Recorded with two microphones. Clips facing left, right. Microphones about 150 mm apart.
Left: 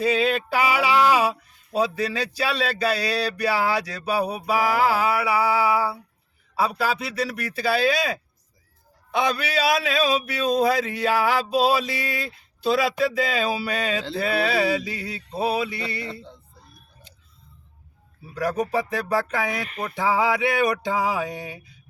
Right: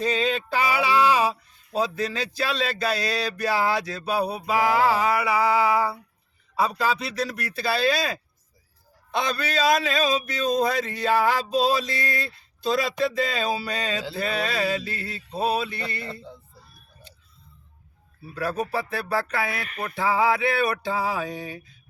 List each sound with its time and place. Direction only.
0.0 s a man's voice: 10° left (ahead or behind)
9.1 s a man's voice: 10° left (ahead or behind)
18.3 s a man's voice: 15° left (ahead or behind)